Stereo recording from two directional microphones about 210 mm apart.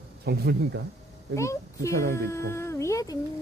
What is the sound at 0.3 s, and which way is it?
Speech, 50° right (ahead or behind).